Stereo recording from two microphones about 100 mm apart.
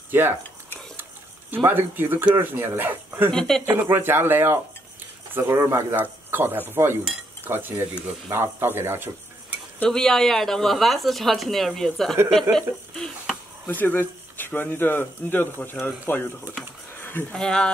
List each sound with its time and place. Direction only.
0.1 s speech: 20° right (ahead or behind)
1.7 s speech: 20° right (ahead or behind)
3.3 s speech: 5° left (ahead or behind)
3.6 s speech: 20° right (ahead or behind)
7.4 s stir: 20° right (ahead or behind)
9.8 s speech: 5° left (ahead or behind)
13.7 s speech: 20° left (ahead or behind)
16.5 s speech: 20° right (ahead or behind)
17.0 s a sound: 25° left (ahead or behind)
17.3 s speech: 5° left (ahead or behind)